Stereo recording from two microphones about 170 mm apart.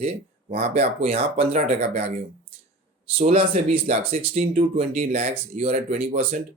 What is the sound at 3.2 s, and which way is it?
Speech, 35° right (ahead or behind).